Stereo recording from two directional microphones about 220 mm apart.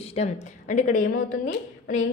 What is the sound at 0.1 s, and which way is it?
Speech, 30° left (ahead or behind).